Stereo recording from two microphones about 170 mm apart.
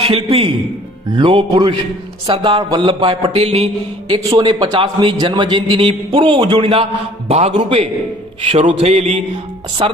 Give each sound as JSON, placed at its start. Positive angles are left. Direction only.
{"t": 0.0, "sound": "a man's voice", "side_deg": -35}
{"t": 4.2, "sound": "a man's voice", "side_deg": -25}